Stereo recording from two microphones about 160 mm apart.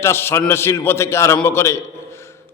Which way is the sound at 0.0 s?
15° left (ahead or behind).